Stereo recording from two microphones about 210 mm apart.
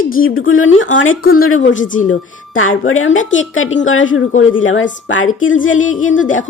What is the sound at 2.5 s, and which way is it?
Speech, 75° left (ahead or behind).